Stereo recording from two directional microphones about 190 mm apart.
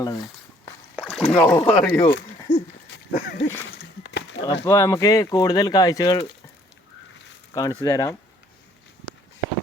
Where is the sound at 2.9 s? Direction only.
60° left (ahead or behind).